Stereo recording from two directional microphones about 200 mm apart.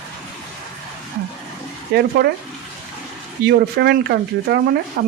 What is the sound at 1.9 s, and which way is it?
Speech, 55° right (ahead or behind).